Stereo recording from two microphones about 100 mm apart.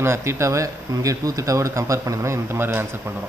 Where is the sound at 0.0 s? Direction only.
25° right (ahead or behind).